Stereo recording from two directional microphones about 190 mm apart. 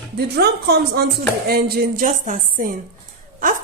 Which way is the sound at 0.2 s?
60° right (ahead or behind).